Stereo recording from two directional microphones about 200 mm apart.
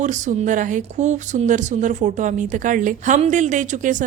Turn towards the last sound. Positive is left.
turn(degrees=-40)  # may be behind; listen again after turning